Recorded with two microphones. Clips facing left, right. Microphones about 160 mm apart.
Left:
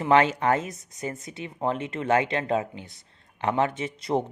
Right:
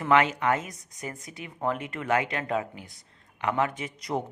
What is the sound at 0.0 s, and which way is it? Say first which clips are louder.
Speech: left 2 dB; 30° left (ahead or behind).